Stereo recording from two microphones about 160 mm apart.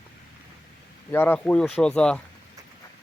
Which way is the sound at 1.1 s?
15° left (ahead or behind).